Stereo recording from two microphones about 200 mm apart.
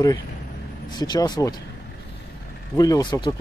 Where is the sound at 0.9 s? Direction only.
20° left (ahead or behind).